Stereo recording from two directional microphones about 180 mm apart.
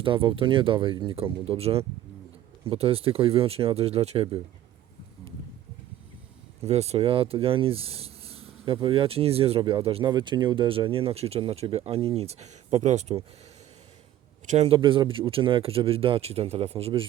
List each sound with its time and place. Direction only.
0.0 s speech: 30° right (ahead or behind)
6.6 s speech: 35° right (ahead or behind)
14.4 s speech: 35° right (ahead or behind)